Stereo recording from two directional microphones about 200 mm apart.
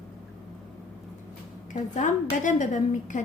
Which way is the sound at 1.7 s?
40° left (ahead or behind).